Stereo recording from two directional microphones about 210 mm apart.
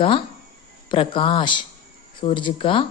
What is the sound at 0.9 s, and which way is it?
Speech, 25° left (ahead or behind).